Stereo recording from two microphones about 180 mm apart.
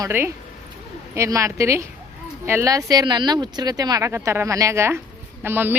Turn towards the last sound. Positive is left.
turn(degrees=-10)  # may be behind; listen again after turning